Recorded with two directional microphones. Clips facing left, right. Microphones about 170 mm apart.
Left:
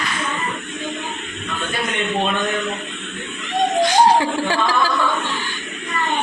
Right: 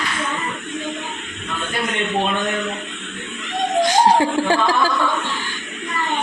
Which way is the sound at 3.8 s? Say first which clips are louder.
Even; 45° right (ahead or behind).